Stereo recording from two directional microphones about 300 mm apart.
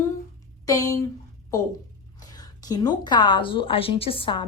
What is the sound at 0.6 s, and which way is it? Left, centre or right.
Speech, centre.